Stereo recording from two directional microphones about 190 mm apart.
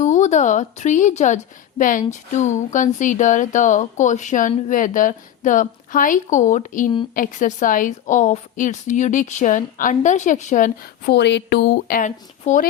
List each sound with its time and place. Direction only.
0.0 s speech: 40° left (ahead or behind)
11.0 s speech: 60° left (ahead or behind); by 12.6 s 40° left (ahead or behind)